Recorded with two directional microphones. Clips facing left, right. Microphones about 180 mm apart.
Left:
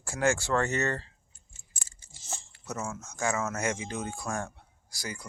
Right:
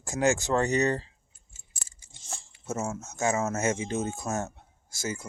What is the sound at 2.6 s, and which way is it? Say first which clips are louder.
Speech: right 4 dB; 25° right (ahead or behind).